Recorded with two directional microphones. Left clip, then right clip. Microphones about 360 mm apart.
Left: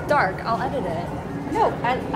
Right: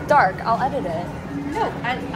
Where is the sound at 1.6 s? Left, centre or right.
Centre.